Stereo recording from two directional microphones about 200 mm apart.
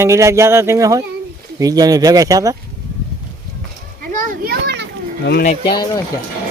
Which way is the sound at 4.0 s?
45° right (ahead or behind).